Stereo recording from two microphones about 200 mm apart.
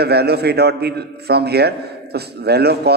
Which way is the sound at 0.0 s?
55° right (ahead or behind).